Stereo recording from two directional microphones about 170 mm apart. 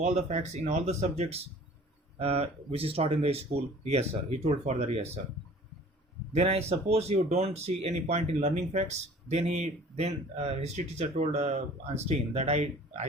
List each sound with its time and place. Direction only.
0.0 s speech: 40° right (ahead or behind)
6.3 s speech: 40° right (ahead or behind)